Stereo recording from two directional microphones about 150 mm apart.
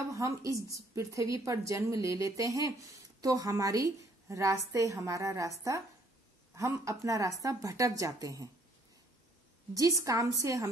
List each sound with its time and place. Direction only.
0.1 s a woman's voice: 20° right (ahead or behind)
10.0 s a woman's voice: 20° right (ahead or behind)